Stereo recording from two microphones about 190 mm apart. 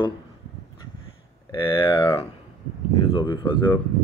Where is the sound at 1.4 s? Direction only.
25° left (ahead or behind).